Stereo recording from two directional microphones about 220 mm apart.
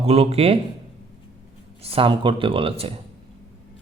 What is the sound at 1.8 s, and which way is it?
Speech, 25° right (ahead or behind).